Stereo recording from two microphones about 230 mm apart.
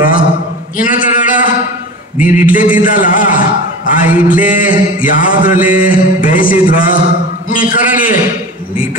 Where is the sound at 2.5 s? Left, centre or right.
Left.